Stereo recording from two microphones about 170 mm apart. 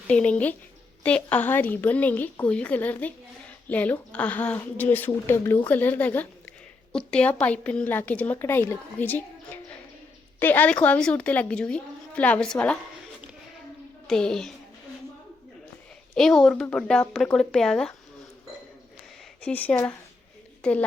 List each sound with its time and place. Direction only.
0.1 s a woman's voice: 5° left (ahead or behind)
14.1 s speech: 5° left (ahead or behind)
16.1 s speech: centre (ahead or behind)
19.4 s a woman's voice: 10° left (ahead or behind)